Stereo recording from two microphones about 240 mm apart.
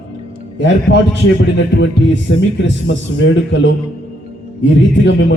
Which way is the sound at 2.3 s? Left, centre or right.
Left.